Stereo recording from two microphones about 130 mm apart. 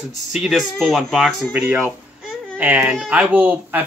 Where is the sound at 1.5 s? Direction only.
15° right (ahead or behind).